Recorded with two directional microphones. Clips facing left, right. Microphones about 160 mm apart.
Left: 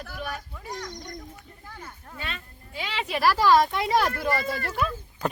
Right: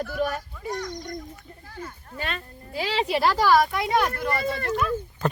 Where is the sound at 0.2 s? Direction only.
45° right (ahead or behind).